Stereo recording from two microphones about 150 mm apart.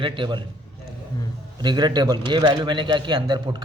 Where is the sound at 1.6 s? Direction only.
30° right (ahead or behind).